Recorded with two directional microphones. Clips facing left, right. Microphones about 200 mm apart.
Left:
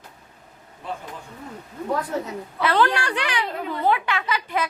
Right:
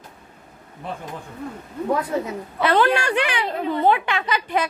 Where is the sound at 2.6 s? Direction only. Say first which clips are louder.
Right 3 dB; 20° right (ahead or behind).